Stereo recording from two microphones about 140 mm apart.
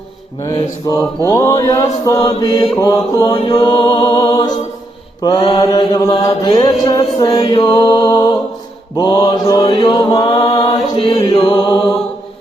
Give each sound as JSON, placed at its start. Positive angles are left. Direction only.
{"t": 0.4, "sound": "mantra", "side_deg": 25}
{"t": 2.2, "sound": "mantra", "side_deg": 30}
{"t": 3.2, "sound": "chant", "side_deg": 45}
{"t": 3.5, "sound": "mantra", "side_deg": 30}
{"t": 6.6, "sound": "mantra", "side_deg": 25}
{"t": 10.9, "sound": "chant", "side_deg": 40}
{"t": 11.3, "sound": "mantra", "side_deg": 30}